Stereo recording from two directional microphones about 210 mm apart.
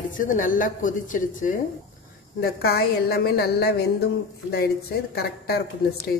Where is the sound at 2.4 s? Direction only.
50° left (ahead or behind).